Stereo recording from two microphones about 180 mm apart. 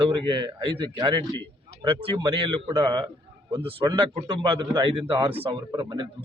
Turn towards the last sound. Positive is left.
turn(degrees=-25)  # may be behind; listen again after turning